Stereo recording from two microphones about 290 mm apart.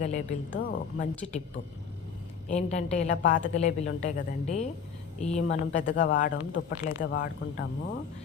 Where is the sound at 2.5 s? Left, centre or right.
Left.